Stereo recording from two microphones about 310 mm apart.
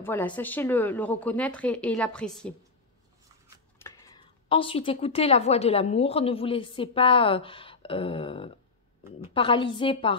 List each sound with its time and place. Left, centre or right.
0.0 s speech: centre
3.8 s speech: centre